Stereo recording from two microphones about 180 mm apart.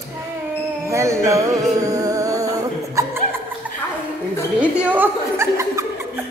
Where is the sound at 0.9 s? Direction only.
15° right (ahead or behind).